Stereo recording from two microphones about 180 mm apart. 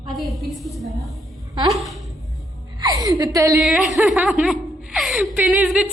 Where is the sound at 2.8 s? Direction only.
20° right (ahead or behind).